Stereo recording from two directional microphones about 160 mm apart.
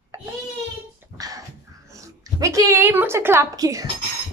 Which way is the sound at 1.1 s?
20° right (ahead or behind).